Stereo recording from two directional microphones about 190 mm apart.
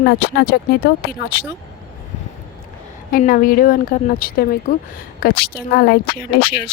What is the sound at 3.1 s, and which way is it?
A woman's voice, 45° left (ahead or behind).